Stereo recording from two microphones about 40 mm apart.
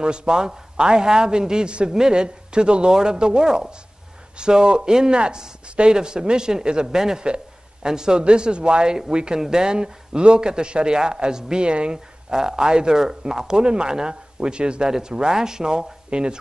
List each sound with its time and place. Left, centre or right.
0.0 s a man's voice: right